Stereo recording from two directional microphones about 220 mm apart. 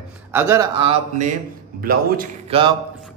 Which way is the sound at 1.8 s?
40° right (ahead or behind).